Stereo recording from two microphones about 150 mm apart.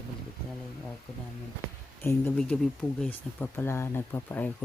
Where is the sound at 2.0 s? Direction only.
15° left (ahead or behind).